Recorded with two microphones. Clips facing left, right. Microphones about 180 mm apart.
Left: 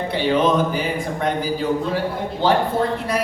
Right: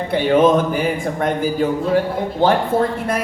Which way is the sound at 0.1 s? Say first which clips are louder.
Right 5 dB; 50° right (ahead or behind).